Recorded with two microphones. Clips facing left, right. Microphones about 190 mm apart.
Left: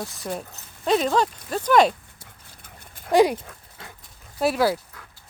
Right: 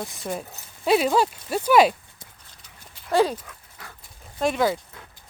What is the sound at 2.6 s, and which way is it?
Horse, 50° left (ahead or behind).